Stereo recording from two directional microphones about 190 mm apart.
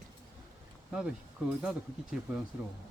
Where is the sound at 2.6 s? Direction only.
5° right (ahead or behind).